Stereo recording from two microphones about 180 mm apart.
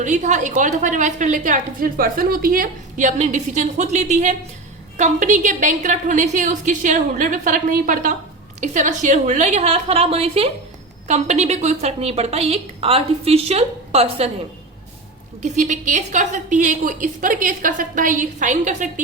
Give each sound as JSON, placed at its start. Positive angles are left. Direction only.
{"t": 0.0, "sound": "a woman's voice", "side_deg": -40}
{"t": 15.5, "sound": "a woman's voice", "side_deg": -45}